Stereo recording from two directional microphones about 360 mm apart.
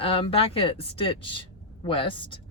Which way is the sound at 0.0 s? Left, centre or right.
Centre.